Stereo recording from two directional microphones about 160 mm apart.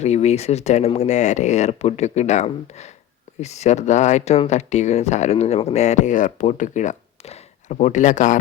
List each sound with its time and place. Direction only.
0.0 s speech: 45° left (ahead or behind)